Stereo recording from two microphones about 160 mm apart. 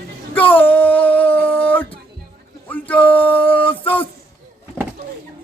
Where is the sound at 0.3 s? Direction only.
10° left (ahead or behind).